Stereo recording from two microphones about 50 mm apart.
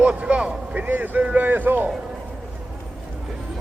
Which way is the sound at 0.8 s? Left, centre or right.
Right.